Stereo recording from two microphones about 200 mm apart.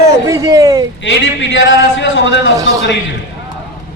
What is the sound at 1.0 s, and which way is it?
A man's voice, 70° left (ahead or behind).